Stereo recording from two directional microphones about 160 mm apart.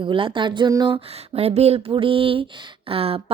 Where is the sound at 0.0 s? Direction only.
30° right (ahead or behind).